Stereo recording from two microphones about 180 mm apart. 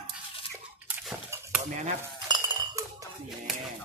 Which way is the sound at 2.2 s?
25° right (ahead or behind).